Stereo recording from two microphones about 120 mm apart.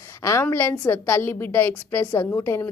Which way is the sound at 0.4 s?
20° left (ahead or behind).